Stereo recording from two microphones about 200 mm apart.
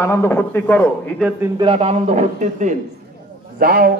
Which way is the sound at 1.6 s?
30° right (ahead or behind).